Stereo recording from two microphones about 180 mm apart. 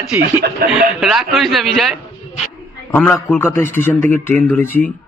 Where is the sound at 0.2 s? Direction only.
55° right (ahead or behind).